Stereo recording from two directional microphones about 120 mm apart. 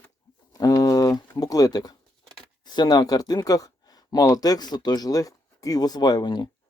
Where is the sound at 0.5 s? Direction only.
30° left (ahead or behind).